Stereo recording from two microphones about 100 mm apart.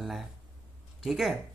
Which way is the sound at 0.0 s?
Centre (ahead or behind).